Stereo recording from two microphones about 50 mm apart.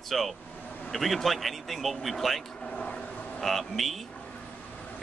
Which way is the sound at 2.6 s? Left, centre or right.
Left.